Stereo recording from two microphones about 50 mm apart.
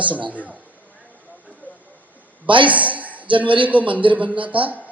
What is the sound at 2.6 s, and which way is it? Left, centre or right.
A man's voice, right.